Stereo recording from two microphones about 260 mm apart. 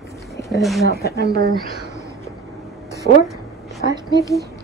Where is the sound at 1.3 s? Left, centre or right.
Right.